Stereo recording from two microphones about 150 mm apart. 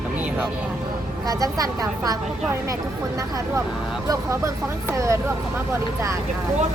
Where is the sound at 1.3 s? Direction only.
25° right (ahead or behind).